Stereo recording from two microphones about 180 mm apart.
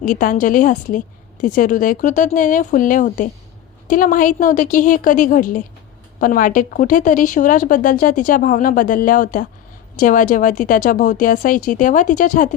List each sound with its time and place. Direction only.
0.0 s a woman's voice: 50° left (ahead or behind)